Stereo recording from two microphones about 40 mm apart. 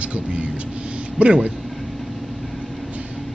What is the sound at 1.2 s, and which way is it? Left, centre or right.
Speech, right.